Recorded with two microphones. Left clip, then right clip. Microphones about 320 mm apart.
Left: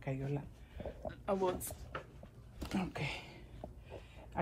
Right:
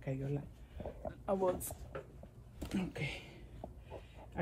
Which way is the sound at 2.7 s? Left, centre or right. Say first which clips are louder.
Left 1 dB; left.